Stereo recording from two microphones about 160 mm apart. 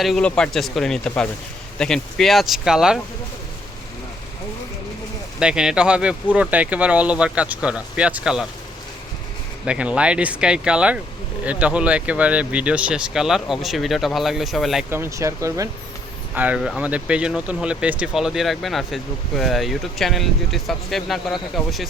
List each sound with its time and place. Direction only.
0.0 s speech: 5° left (ahead or behind)
5.4 s speech: 5° right (ahead or behind)
9.6 s speech: 5° right (ahead or behind)
14.8 s speech: 15° right (ahead or behind)